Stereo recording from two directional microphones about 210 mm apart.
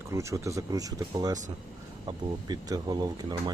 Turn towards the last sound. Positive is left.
turn(degrees=-20)  # may be behind; listen again after turning